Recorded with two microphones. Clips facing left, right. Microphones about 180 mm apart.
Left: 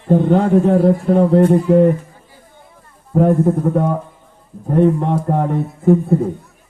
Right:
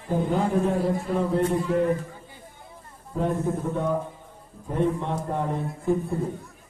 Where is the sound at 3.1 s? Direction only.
70° left (ahead or behind).